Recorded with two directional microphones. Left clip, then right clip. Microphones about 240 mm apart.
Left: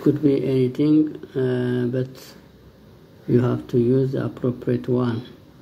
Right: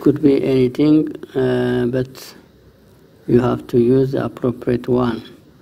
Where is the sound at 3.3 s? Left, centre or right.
Right.